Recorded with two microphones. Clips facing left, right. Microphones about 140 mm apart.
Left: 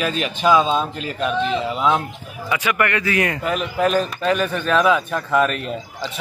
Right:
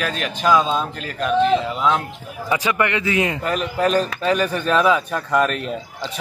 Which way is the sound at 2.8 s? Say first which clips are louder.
Even; 20° right (ahead or behind).